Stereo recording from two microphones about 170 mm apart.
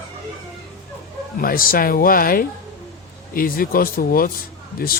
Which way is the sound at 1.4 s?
60° left (ahead or behind).